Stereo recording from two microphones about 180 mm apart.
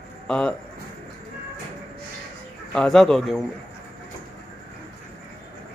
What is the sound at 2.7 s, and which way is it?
Speech, centre (ahead or behind).